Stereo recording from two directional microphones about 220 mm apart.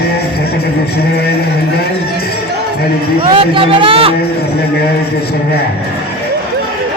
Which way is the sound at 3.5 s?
25° right (ahead or behind).